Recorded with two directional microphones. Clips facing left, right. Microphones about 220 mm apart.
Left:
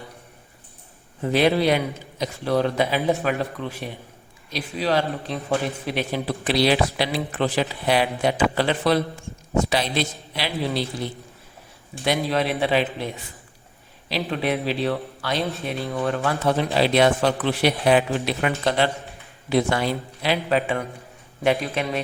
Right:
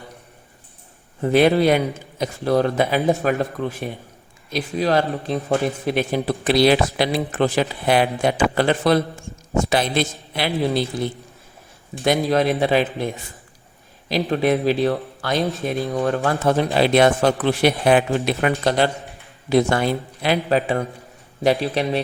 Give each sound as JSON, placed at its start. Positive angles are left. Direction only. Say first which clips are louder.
{"t": 1.2, "sound": "a man's voice", "louder": "right 4 dB", "side_deg": -50}
{"t": 12.0, "sound": "a man's voice", "louder": "right 4 dB", "side_deg": -45}
{"t": 14.1, "sound": "a man's voice", "louder": "right 5 dB", "side_deg": -45}